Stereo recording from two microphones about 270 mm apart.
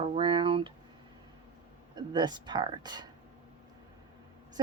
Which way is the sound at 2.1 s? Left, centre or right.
Centre.